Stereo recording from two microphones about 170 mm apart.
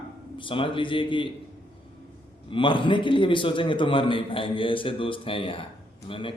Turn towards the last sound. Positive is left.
turn(degrees=30)  # may be behind; listen again after turning